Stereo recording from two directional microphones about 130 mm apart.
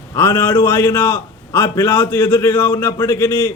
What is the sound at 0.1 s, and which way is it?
A man's voice, 15° left (ahead or behind).